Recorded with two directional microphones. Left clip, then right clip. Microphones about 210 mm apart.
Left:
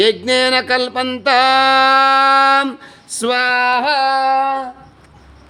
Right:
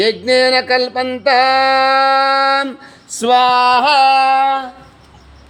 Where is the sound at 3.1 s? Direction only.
Centre (ahead or behind).